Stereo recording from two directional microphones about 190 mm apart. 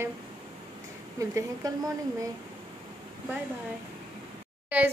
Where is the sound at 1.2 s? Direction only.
15° right (ahead or behind).